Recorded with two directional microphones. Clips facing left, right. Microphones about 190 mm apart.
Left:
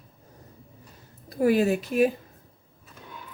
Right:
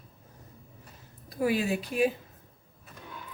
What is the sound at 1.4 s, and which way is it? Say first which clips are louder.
Speech: left 6 dB; 45° left (ahead or behind).